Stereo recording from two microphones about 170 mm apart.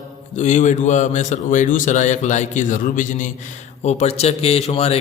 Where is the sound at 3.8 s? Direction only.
40° left (ahead or behind).